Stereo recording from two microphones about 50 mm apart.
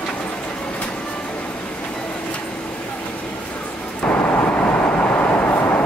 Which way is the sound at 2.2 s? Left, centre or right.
Left.